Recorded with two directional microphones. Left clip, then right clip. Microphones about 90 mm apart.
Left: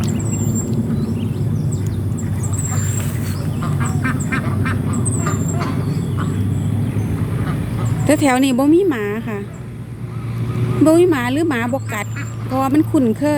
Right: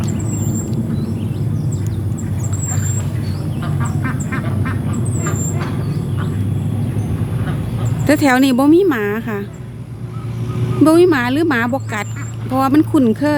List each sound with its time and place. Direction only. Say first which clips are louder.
4.0 s vehicle: left 5 dB; 90° left
8.0 s speech: right 2 dB; 40° right (ahead or behind)
10.8 s speech: right 2 dB; 45° right (ahead or behind); by 13.1 s 65° right (ahead or behind)